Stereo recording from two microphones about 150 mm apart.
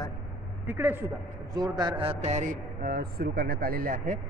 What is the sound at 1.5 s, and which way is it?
A man's voice, 30° right (ahead or behind).